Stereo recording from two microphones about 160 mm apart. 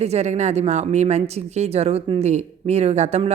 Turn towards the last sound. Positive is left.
turn(degrees=-40)  # may be behind; listen again after turning